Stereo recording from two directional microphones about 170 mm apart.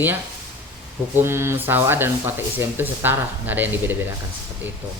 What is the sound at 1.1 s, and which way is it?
Speech, 15° right (ahead or behind).